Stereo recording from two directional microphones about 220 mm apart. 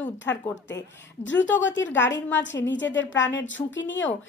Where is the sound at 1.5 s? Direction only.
55° left (ahead or behind).